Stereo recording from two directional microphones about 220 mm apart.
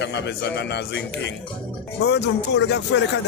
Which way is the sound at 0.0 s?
50° left (ahead or behind).